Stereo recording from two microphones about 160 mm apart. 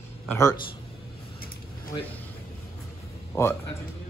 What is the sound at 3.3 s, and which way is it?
Speech, 15° left (ahead or behind).